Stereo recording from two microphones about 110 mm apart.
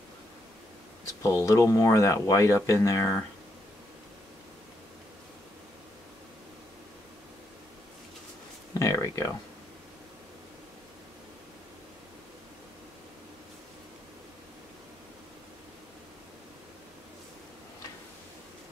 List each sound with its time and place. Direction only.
1.2 s speech: 30° left (ahead or behind)
8.7 s speech: 30° left (ahead or behind)